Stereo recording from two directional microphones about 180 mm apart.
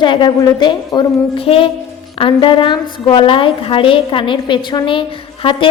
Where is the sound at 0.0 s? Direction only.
25° left (ahead or behind).